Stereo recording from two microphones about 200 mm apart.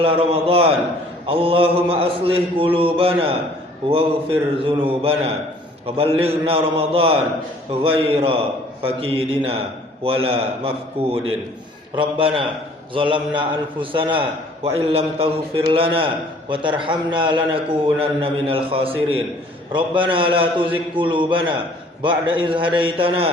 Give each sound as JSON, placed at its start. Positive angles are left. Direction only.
{"t": 0.0, "sound": "a man's voice", "side_deg": -30}
{"t": 11.9, "sound": "a man's voice", "side_deg": -25}